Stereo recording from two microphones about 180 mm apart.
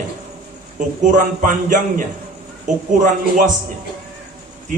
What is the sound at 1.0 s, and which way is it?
A man's voice, 45° right (ahead or behind).